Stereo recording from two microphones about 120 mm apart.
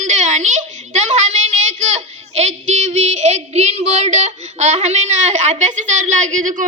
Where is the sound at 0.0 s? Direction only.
80° right.